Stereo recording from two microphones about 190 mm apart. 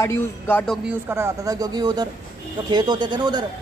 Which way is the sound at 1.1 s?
15° right (ahead or behind).